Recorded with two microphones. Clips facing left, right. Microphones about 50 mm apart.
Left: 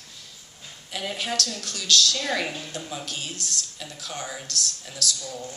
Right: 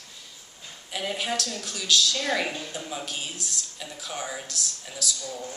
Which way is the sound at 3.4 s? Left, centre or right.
Left.